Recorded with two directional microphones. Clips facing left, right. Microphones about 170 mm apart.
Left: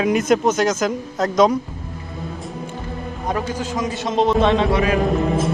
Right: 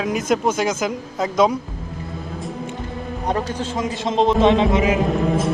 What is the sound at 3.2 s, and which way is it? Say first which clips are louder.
A man's voice: even; 30° right (ahead or behind).